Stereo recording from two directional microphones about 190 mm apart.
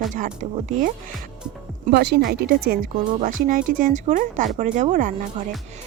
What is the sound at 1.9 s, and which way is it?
Speech, 60° right (ahead or behind).